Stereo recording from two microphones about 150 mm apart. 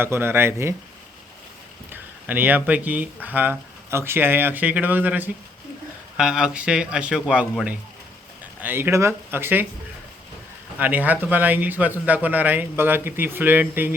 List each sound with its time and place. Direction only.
0.0 s speech: 15° right (ahead or behind)
1.9 s speech: 10° right (ahead or behind)
8.6 s speech: 15° right (ahead or behind)
10.8 s speech: 10° right (ahead or behind)